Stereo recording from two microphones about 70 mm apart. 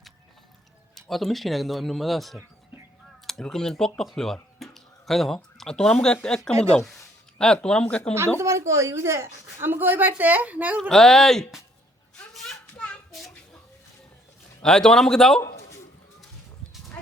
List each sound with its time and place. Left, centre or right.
0.9 s speech: centre
8.4 s speech: right
9.6 s a woman's voice: right
10.8 s speech: centre
14.6 s speech: centre